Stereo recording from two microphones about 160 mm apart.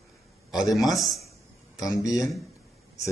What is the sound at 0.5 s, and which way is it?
Speech, centre (ahead or behind).